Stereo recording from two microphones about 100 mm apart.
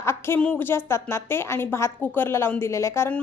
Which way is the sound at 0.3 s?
15° left (ahead or behind).